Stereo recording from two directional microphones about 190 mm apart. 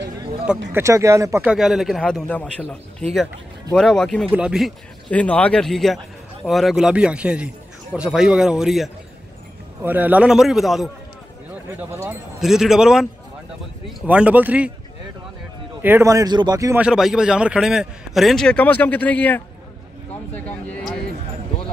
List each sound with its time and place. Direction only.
0.7 s a man's voice: 15° right (ahead or behind)
1.5 s a man's voice: centre (ahead or behind)
12.1 s a man's voice: centre (ahead or behind)
14.0 s a man's voice: 5° right (ahead or behind)
15.8 s a man's voice: 15° right (ahead or behind)
16.8 s a man's voice: 5° right (ahead or behind)